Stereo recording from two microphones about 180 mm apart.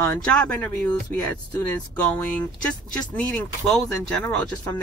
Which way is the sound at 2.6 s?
5° left (ahead or behind).